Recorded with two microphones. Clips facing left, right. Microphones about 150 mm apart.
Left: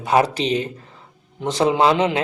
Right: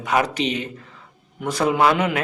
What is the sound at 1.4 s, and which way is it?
Speech, 25° left (ahead or behind).